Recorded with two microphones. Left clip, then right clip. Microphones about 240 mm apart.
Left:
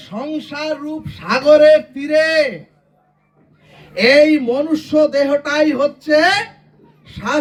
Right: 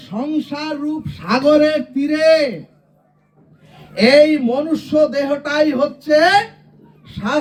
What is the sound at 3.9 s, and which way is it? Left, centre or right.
Speech, centre.